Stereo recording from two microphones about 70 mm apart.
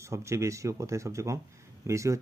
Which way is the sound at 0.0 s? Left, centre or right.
Right.